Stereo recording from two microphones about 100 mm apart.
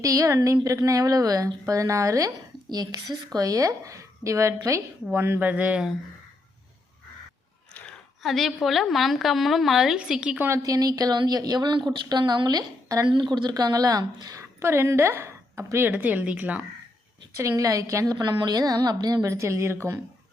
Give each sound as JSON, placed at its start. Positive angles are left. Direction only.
{"t": 0.0, "sound": "a woman's voice", "side_deg": -35}
{"t": 8.2, "sound": "a woman's voice", "side_deg": 0}
{"t": 10.5, "sound": "a woman's voice", "side_deg": -35}
{"t": 15.9, "sound": "speech", "side_deg": -15}
{"t": 17.3, "sound": "a woman's voice", "side_deg": -30}